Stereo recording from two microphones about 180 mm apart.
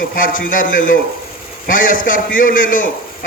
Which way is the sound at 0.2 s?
50° left (ahead or behind).